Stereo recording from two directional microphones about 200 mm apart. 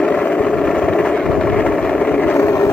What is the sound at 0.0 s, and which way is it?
Vehicle, 5° left (ahead or behind).